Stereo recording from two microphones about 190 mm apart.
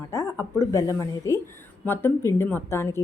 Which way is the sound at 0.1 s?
15° left (ahead or behind).